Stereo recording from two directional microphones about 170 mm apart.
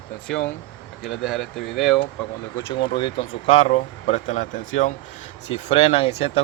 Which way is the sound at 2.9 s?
25° left (ahead or behind).